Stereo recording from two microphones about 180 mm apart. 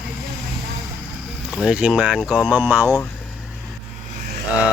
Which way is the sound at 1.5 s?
Centre (ahead or behind).